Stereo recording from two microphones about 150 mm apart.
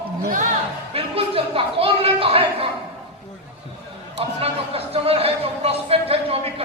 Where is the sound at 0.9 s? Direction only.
40° right (ahead or behind).